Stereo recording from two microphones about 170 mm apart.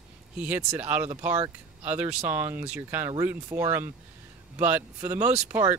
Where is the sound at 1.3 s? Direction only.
35° right (ahead or behind).